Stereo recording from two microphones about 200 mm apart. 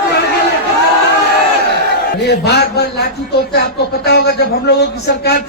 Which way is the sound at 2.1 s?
55° left (ahead or behind).